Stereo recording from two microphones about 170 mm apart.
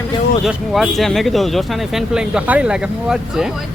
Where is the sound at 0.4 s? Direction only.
Centre (ahead or behind).